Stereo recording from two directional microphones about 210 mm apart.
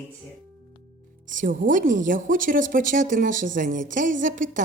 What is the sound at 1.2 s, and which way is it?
A woman's voice, 40° right (ahead or behind).